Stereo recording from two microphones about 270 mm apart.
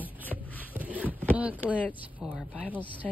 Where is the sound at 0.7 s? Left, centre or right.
Centre.